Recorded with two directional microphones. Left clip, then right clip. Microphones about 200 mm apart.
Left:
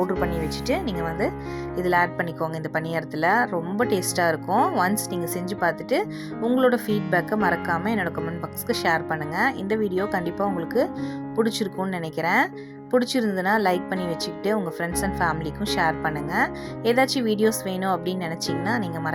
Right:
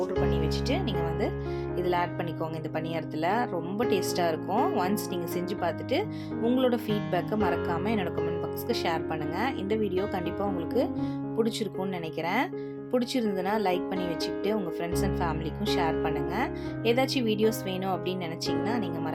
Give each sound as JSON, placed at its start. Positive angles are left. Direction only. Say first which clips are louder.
{"t": 0.4, "sound": "speech", "louder": "left 4 dB", "side_deg": 25}